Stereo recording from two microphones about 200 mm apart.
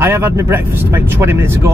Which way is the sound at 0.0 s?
10° right (ahead or behind).